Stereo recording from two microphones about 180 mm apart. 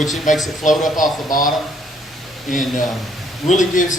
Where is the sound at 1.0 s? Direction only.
50° left (ahead or behind).